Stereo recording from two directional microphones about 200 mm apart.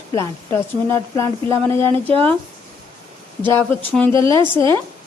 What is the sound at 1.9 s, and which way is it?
Speech, 25° right (ahead or behind).